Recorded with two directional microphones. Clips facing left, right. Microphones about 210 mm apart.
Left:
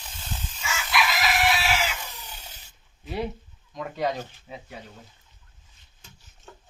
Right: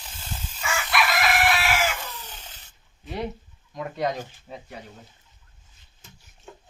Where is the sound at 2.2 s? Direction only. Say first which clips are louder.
Right 1 dB; 10° left (ahead or behind).